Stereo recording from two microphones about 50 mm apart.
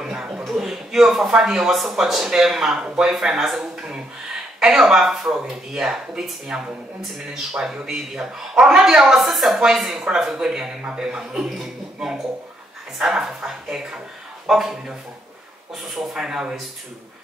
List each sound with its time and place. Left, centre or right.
0.0 s chuckle: centre
0.5 s a man's voice: centre
11.4 s speech: centre
14.5 s speech: centre